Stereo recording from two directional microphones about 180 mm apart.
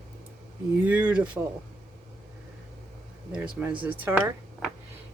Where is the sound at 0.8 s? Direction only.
10° right (ahead or behind).